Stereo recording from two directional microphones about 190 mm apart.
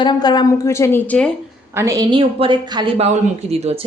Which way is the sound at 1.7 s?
15° right (ahead or behind).